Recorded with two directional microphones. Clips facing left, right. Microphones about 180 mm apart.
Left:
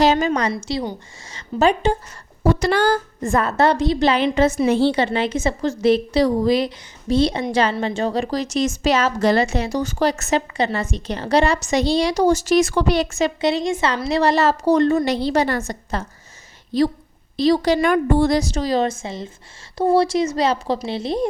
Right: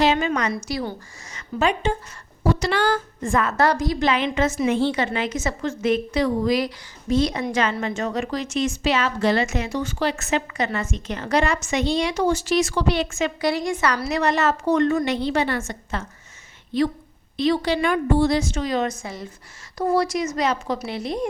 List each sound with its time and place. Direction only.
0.0 s a woman's voice: 40° left (ahead or behind)
2.4 s speech: 50° left (ahead or behind)
3.6 s a woman's voice: 25° left (ahead or behind)
13.4 s a woman's voice: 25° left (ahead or behind)